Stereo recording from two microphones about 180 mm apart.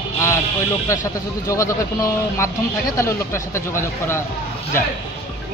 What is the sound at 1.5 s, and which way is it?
Speech, 15° left (ahead or behind).